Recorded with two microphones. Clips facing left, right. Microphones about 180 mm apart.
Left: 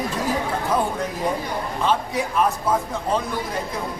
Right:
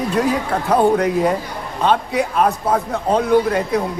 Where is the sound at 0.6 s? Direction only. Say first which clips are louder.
Right 12 dB; 70° right (ahead or behind).